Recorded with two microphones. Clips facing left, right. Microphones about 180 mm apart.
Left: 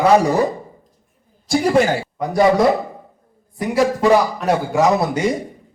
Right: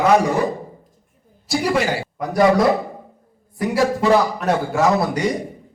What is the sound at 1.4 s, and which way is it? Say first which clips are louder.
Speech: left 3 dB; 50° left (ahead or behind).